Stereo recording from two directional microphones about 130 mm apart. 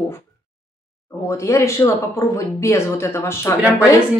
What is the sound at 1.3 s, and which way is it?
Speech, 25° left (ahead or behind).